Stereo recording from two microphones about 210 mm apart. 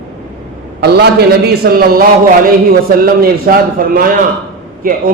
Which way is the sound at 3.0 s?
45° right (ahead or behind).